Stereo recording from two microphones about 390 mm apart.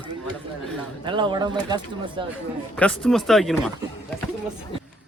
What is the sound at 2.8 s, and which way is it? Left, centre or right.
Speech, centre.